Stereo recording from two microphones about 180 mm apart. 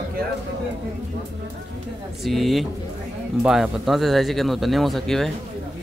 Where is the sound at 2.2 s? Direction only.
Centre (ahead or behind).